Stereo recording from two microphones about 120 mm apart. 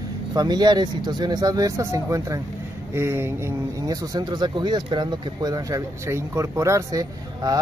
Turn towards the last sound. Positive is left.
turn(degrees=-30)  # may be behind; listen again after turning